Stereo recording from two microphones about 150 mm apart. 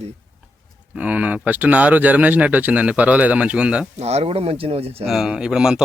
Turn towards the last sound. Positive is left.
turn(degrees=-5)  # may be behind; listen again after turning